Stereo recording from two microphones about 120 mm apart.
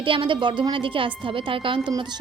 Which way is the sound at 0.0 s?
45° right (ahead or behind).